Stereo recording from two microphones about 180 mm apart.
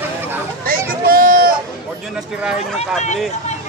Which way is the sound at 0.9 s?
55° right (ahead or behind).